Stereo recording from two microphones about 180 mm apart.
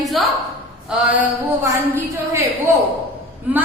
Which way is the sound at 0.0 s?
Centre (ahead or behind).